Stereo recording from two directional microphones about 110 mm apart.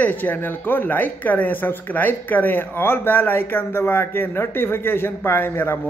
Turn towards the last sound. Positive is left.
turn(degrees=20)  # may be behind; listen again after turning